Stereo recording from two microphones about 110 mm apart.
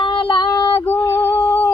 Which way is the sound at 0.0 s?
45° left (ahead or behind).